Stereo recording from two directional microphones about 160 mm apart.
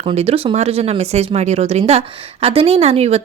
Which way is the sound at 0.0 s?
40° right (ahead or behind).